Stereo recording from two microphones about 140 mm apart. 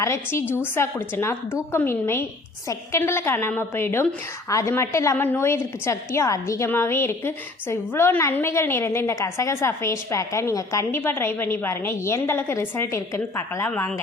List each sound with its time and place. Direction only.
0.0 s a woman's voice: 20° left (ahead or behind)